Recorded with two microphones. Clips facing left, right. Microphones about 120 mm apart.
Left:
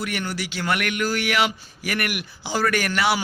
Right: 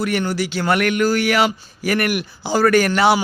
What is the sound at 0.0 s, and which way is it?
A man's voice, 35° right (ahead or behind).